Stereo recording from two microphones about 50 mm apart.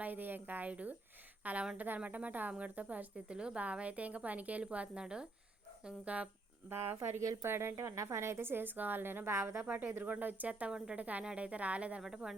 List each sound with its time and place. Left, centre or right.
0.0 s speech: right
3.3 s a woman's voice: centre
6.7 s a woman's voice: right
9.2 s speech: right
9.6 s speech: right
10.7 s a woman's voice: centre
10.9 s a woman's voice: right
12.0 s a woman's voice: centre